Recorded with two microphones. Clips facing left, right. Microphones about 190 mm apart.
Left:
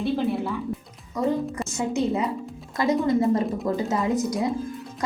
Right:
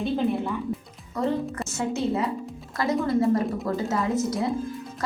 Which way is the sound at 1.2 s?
10° left (ahead or behind).